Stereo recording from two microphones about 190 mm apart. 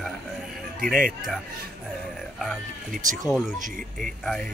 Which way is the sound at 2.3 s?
Centre (ahead or behind).